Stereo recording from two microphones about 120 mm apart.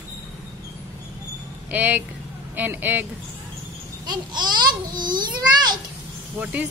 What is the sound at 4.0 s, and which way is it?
A child's voice, 35° right (ahead or behind).